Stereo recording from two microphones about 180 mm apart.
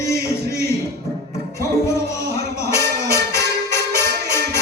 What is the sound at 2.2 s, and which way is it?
Music, 65° right (ahead or behind).